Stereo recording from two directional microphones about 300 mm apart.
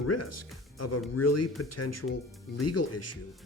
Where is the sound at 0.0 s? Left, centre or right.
Left.